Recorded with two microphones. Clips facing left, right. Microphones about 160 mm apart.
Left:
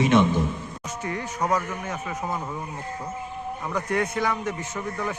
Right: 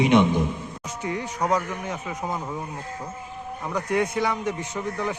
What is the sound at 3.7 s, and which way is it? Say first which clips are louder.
A man's voice: right 2 dB; 10° right (ahead or behind).